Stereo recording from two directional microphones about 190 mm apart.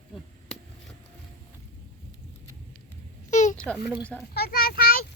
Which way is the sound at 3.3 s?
40° left (ahead or behind).